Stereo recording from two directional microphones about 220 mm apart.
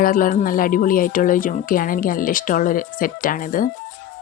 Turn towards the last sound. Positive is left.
turn(degrees=40)  # may be behind; listen again after turning